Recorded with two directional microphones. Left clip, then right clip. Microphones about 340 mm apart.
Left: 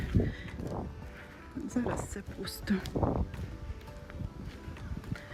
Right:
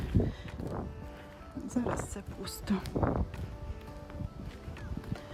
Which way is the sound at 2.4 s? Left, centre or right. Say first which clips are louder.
Left 1 dB; centre.